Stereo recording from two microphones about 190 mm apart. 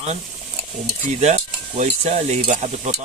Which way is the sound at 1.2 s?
35° right (ahead or behind).